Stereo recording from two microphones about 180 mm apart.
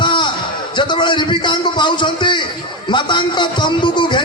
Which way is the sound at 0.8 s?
25° left (ahead or behind).